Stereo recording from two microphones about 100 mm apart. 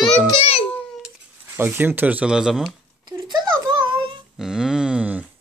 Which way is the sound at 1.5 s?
20° right (ahead or behind).